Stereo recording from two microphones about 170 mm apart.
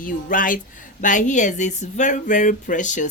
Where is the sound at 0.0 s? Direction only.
55° left (ahead or behind).